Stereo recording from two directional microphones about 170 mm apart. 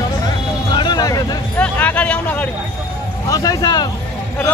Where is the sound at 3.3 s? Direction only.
20° left (ahead or behind).